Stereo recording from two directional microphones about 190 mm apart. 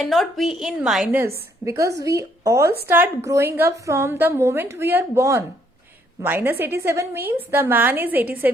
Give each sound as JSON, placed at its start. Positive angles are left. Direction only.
{"t": 0.0, "sound": "a woman's voice", "side_deg": 0}
{"t": 1.6, "sound": "a woman's voice", "side_deg": -15}